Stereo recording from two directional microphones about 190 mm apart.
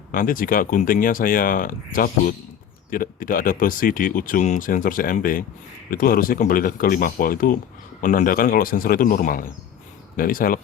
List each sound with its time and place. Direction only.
0.1 s speech: 45° left (ahead or behind)